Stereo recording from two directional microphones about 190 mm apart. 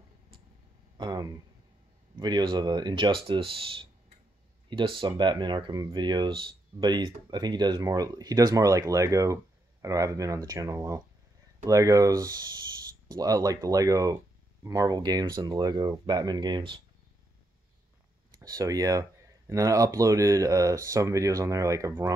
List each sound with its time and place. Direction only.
0.9 s speech: 20° right (ahead or behind)
18.4 s speech: 20° right (ahead or behind)